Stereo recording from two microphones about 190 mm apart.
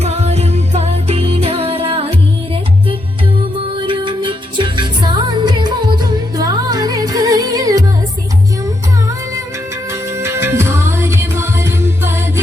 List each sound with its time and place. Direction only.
0.0 s music: 35° right (ahead or behind)
3.8 s music: 25° right (ahead or behind)
10.2 s music: 15° right (ahead or behind)